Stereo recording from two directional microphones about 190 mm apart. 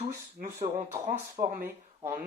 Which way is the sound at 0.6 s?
35° right (ahead or behind).